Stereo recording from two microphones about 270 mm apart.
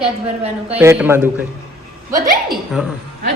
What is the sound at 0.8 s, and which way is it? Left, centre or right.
Speech, centre.